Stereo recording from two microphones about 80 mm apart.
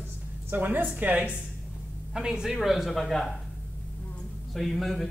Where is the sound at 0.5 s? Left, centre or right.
Right.